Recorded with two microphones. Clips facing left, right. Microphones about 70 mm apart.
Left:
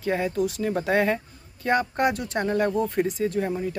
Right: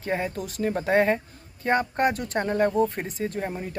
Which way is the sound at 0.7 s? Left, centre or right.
Right.